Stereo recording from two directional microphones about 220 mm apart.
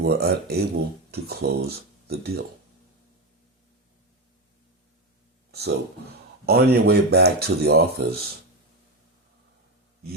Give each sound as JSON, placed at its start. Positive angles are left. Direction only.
{"t": 0.0, "sound": "speech", "side_deg": -45}
{"t": 5.5, "sound": "a sound", "side_deg": -45}
{"t": 6.4, "sound": "speech", "side_deg": -45}